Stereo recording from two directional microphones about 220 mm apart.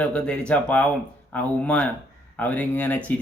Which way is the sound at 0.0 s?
5° left (ahead or behind).